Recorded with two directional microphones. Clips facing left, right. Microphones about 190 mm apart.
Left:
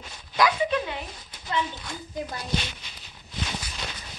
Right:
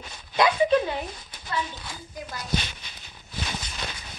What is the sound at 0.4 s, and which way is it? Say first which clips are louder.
Speech: right 3 dB; 35° right (ahead or behind).